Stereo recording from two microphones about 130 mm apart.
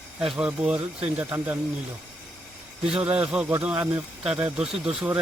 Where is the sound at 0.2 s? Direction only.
5° right (ahead or behind).